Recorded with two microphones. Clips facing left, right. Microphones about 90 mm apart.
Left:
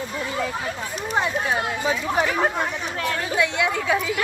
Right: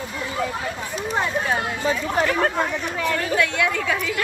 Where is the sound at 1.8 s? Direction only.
10° left (ahead or behind).